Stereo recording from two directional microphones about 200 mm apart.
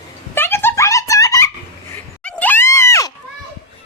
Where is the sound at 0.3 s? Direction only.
10° left (ahead or behind).